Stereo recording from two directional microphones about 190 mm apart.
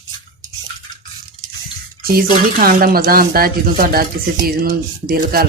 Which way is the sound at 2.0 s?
50° right (ahead or behind).